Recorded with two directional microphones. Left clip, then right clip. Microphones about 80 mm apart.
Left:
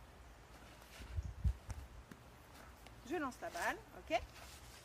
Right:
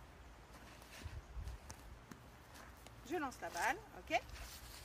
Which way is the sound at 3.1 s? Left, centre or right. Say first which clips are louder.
Even; centre.